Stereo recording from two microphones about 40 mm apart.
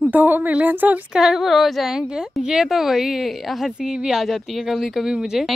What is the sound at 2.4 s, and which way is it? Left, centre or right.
A woman's voice, centre.